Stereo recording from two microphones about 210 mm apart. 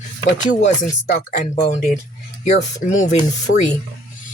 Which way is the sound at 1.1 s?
40° left (ahead or behind).